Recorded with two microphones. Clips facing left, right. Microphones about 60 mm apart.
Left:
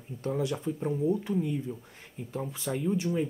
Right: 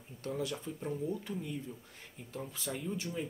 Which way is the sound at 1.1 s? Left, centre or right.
Centre.